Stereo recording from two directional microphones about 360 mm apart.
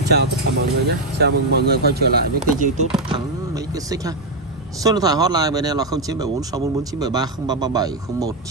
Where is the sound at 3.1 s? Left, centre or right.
Centre.